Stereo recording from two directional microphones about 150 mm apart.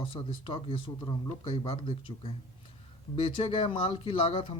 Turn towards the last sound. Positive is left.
turn(degrees=35)  # may be behind; listen again after turning